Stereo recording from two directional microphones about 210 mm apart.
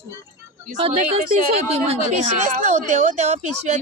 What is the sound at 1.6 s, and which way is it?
Speech, 30° right (ahead or behind).